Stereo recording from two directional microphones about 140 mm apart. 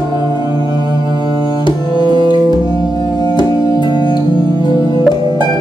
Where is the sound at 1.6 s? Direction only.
30° left (ahead or behind).